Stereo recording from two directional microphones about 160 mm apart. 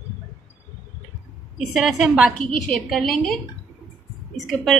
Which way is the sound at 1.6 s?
Centre (ahead or behind).